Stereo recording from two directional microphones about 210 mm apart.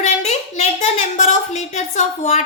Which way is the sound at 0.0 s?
30° left (ahead or behind).